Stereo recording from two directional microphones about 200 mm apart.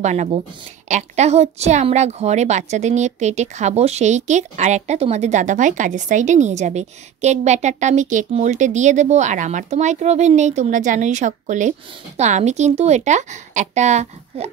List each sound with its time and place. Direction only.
0.0 s a woman's voice: 35° right (ahead or behind)